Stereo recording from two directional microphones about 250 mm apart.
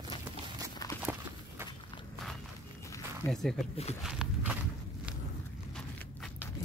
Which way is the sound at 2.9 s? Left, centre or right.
Centre.